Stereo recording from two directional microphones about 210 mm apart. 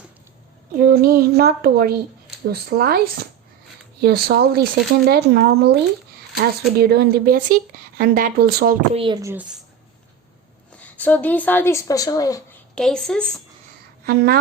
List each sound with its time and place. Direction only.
0.8 s speech: 45° right (ahead or behind)
9.0 s a woman's voice: 20° right (ahead or behind)
10.7 s a woman's voice: 5° left (ahead or behind)
12.7 s a woman's voice: 5° left (ahead or behind)
14.0 s a woman's voice: 45° right (ahead or behind)